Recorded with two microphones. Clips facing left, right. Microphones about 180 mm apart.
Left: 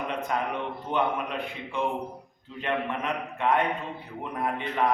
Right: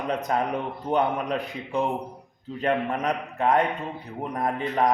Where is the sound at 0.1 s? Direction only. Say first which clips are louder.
Right 7 dB; 40° right (ahead or behind).